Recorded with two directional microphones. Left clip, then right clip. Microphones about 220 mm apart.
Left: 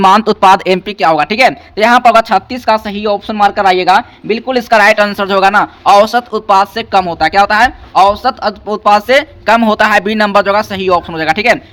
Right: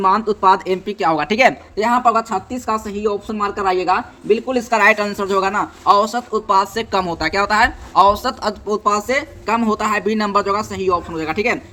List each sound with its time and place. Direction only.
0.0 s speech: 40° left (ahead or behind)
0.9 s speech: 15° left (ahead or behind)
1.7 s speech: 25° left (ahead or behind)